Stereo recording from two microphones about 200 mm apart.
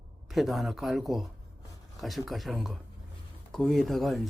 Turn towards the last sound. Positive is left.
turn(degrees=0)  # may be behind; listen again after turning